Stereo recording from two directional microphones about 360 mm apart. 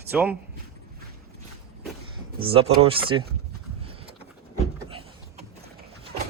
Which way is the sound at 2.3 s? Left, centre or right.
Centre.